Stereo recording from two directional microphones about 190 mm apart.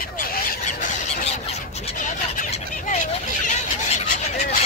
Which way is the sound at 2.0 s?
40° left (ahead or behind).